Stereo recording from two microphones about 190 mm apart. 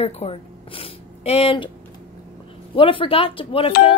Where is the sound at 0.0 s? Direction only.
35° left (ahead or behind).